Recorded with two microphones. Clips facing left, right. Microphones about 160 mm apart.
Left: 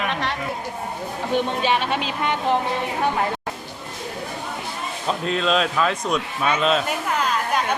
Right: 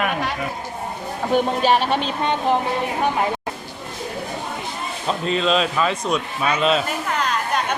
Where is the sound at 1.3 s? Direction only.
40° right (ahead or behind).